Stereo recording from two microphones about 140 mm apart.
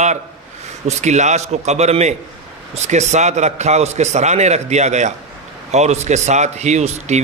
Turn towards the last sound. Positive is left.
turn(degrees=-55)  # may be behind; listen again after turning